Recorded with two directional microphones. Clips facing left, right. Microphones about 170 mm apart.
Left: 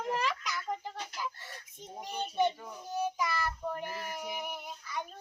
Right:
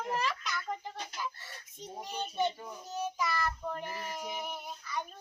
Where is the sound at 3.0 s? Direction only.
10° left (ahead or behind).